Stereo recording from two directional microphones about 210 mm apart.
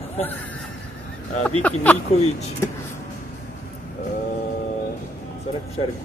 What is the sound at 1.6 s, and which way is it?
Speech, 5° left (ahead or behind).